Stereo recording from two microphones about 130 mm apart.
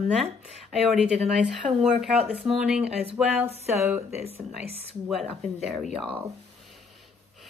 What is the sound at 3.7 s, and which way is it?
Speech, 15° right (ahead or behind).